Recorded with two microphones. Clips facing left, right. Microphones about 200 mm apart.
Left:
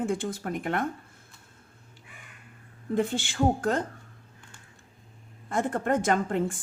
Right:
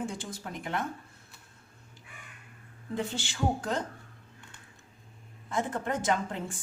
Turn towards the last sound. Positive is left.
turn(degrees=55)  # may be behind; listen again after turning